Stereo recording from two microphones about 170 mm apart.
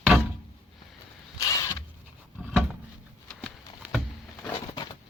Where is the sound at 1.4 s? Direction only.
15° left (ahead or behind).